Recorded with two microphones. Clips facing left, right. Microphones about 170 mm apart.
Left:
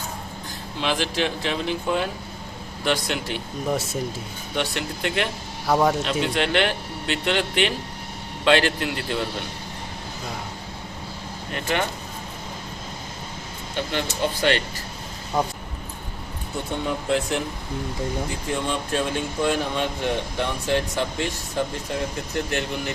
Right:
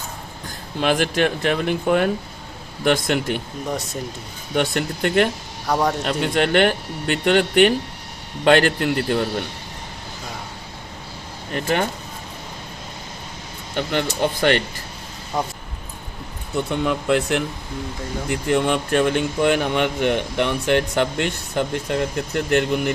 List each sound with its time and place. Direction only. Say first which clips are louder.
0.8 s speech: right 5 dB; 50° right (ahead or behind)
3.7 s speech: left 2 dB; centre (ahead or behind)
4.5 s speech: right 6 dB; 50° right (ahead or behind)
5.6 s speech: left 1 dB; 5° left (ahead or behind)
6.1 s speech: right 3 dB; 45° right (ahead or behind)
11.5 s speech: right 4 dB; 45° right (ahead or behind)
13.7 s speech: right 4 dB; 55° right (ahead or behind)
16.8 s speech: right 3 dB; 70° right (ahead or behind)